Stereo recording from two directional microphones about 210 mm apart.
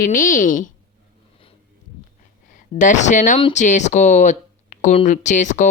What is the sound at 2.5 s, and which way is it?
Speech, 35° left (ahead or behind).